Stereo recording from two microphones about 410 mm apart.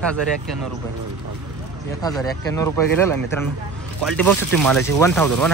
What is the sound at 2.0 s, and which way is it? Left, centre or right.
Speech, centre.